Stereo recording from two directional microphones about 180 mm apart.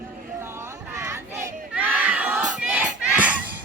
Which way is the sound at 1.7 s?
10° right (ahead or behind).